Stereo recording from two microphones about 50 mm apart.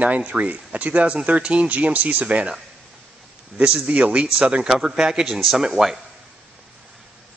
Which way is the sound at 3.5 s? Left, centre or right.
Right.